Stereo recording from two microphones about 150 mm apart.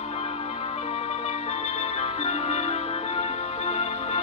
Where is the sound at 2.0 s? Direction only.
45° left (ahead or behind).